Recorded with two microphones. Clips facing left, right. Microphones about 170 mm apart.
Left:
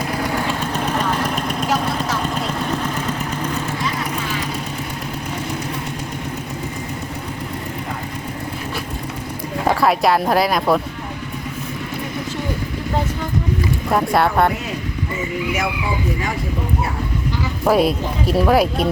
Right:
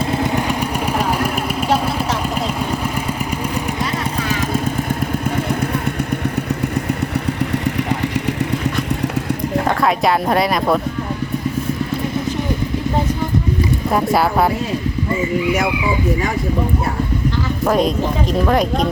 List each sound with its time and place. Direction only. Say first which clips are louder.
0.1 s vehicle: right 3 dB; 20° right (ahead or behind)
9.6 s speech: left 2 dB; centre (ahead or behind)
13.9 s speech: even; centre (ahead or behind)
17.7 s speech: left 1 dB; 5° left (ahead or behind)